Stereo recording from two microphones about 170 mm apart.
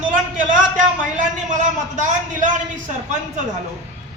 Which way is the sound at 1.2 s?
45° right (ahead or behind).